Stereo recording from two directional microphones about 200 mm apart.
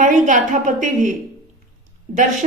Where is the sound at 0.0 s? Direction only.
40° right (ahead or behind).